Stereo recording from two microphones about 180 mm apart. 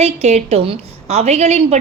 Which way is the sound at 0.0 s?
35° right (ahead or behind).